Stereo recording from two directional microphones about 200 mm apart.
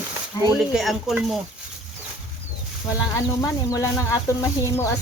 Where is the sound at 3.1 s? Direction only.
15° left (ahead or behind).